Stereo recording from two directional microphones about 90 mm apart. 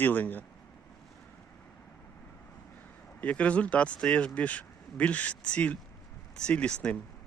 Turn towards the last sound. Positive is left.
turn(degrees=10)  # may be behind; listen again after turning